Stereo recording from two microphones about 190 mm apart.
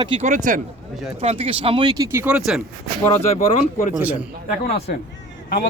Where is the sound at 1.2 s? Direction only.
30° right (ahead or behind); by 2.6 s 5° right (ahead or behind).